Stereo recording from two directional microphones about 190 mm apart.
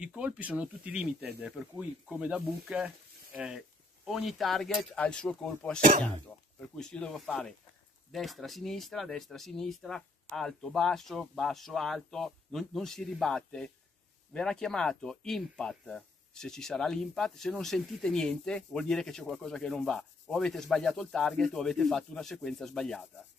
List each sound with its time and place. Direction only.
0.0 s speech: 5° right (ahead or behind)
5.8 s speech: 45° right (ahead or behind)
6.6 s speech: 5° left (ahead or behind)